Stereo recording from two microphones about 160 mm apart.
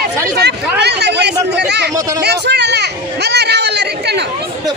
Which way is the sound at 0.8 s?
90° right.